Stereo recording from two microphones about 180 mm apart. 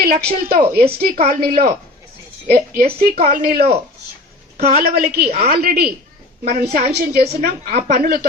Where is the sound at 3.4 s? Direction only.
55° right (ahead or behind).